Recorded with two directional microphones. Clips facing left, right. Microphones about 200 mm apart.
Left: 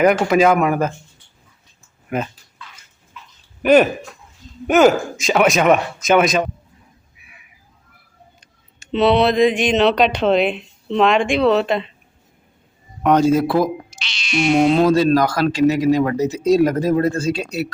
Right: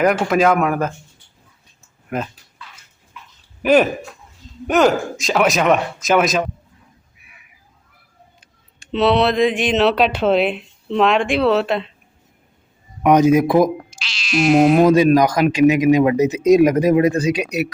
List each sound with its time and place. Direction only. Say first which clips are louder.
0.0 s speech: left 2 dB; centre (ahead or behind)
2.0 s speech: left 1 dB; 5° left (ahead or behind)
3.6 s speech: left 1 dB; centre (ahead or behind)
8.4 s speech: even; centre (ahead or behind)
13.0 s speech: right 2 dB; 15° right (ahead or behind)
13.7 s speech: even; centre (ahead or behind)